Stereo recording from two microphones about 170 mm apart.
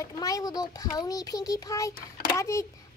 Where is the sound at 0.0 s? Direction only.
20° left (ahead or behind).